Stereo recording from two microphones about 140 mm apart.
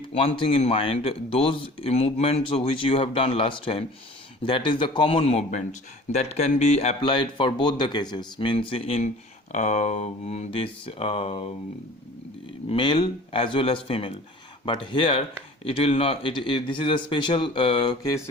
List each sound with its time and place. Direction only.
0.1 s speech: 45° left (ahead or behind)
7.0 s speech: 35° left (ahead or behind)
9.5 s speech: 60° left (ahead or behind)
12.6 s speech: 35° left (ahead or behind)